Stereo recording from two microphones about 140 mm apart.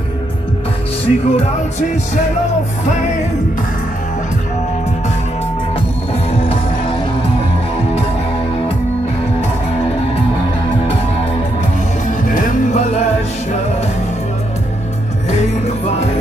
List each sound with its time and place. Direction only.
1.0 s music: 45° left (ahead or behind)
12.3 s music: 70° left (ahead or behind)